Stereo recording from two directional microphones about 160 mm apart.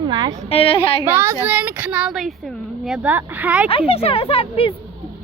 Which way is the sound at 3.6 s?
35° left (ahead or behind).